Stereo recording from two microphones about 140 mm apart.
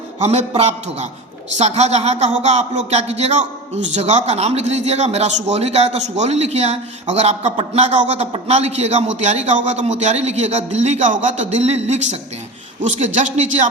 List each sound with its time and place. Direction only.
0.2 s a man's voice: 50° right (ahead or behind)